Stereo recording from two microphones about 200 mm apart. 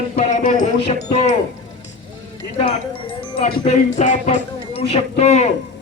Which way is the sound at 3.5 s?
35° left (ahead or behind).